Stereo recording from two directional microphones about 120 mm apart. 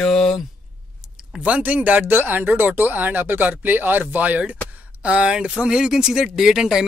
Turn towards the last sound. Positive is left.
turn(degrees=-5)  # may be behind; listen again after turning